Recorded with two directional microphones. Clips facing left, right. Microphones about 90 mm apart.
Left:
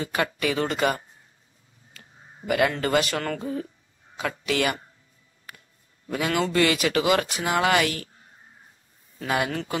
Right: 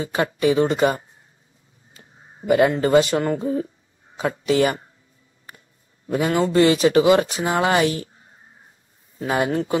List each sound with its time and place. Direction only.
0.0 s speech: 25° right (ahead or behind)
6.0 s a man's voice: 30° right (ahead or behind)
9.2 s speech: 30° right (ahead or behind)